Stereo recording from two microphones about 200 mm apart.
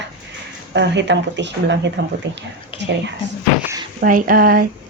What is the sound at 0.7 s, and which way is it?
Speech, 60° right (ahead or behind).